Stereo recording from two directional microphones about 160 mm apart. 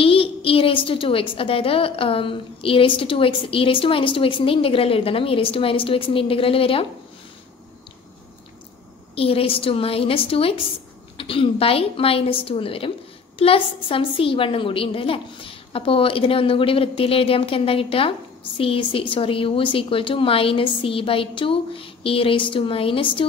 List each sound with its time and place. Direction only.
0.0 s a sound: 35° left (ahead or behind)
1.3 s a woman's voice: 35° left (ahead or behind)
9.1 s a woman's voice: 35° left (ahead or behind)